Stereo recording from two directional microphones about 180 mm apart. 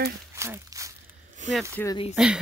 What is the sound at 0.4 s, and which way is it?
Walk, 15° right (ahead or behind).